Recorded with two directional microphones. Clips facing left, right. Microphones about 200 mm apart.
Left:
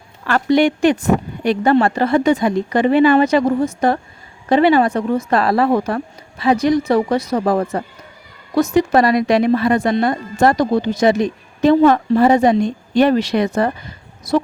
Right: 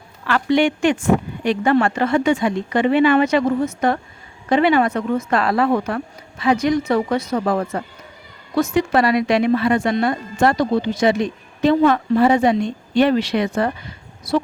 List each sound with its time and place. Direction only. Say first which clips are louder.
0.3 s speech: left 3 dB; 40° left (ahead or behind)